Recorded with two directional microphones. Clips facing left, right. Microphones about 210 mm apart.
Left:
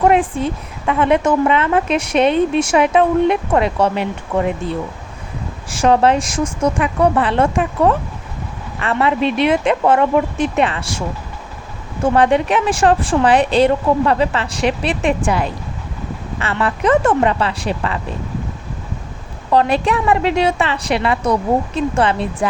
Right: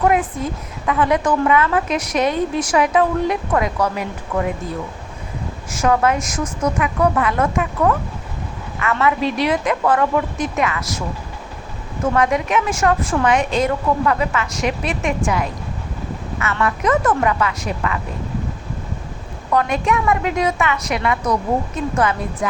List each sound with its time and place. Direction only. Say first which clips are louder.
0.0 s a woman's voice: left 4 dB; 30° left (ahead or behind)
5.7 s a woman's voice: left 4 dB; 30° left (ahead or behind)
12.0 s a woman's voice: left 4 dB; 30° left (ahead or behind)
19.5 s a woman's voice: left 3 dB; 30° left (ahead or behind)